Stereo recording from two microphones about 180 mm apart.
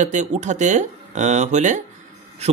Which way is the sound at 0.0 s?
40° right (ahead or behind).